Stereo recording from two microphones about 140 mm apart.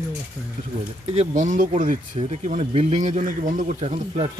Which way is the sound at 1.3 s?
65° right (ahead or behind).